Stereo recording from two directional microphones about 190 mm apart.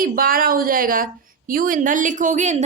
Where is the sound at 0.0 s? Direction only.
50° right (ahead or behind).